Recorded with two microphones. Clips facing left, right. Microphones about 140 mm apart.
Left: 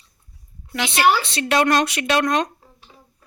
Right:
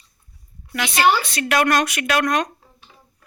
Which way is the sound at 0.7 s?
25° left (ahead or behind).